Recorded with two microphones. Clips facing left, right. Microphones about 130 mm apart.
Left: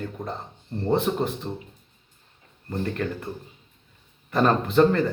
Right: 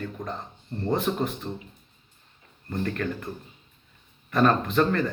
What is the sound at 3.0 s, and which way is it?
Speech, 15° left (ahead or behind).